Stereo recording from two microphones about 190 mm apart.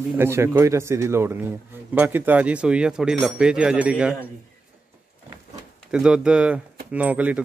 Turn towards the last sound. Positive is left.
turn(degrees=-10)  # may be behind; listen again after turning